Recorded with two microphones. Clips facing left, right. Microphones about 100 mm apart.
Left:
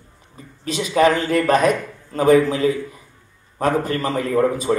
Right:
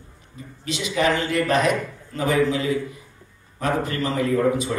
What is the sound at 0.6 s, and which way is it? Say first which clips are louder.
A man's voice: left 6 dB; 40° left (ahead or behind).